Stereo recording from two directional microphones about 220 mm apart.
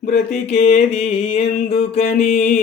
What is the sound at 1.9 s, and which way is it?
Mantra, 30° left (ahead or behind).